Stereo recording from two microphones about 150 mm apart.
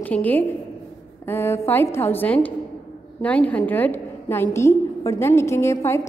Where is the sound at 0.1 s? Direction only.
10° left (ahead or behind).